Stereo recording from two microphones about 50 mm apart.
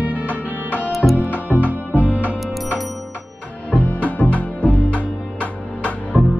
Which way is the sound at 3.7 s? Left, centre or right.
Left.